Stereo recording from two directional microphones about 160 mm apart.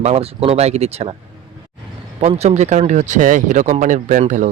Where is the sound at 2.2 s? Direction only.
40° right (ahead or behind).